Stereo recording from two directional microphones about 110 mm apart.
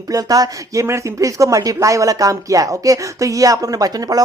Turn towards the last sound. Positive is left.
turn(degrees=-35)  # may be behind; listen again after turning